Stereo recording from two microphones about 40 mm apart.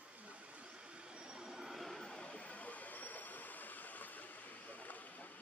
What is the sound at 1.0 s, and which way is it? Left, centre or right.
Train, centre.